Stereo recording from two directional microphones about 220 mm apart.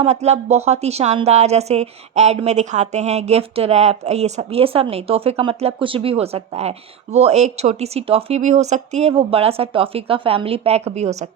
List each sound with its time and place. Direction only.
0.0 s a woman's voice: 30° right (ahead or behind)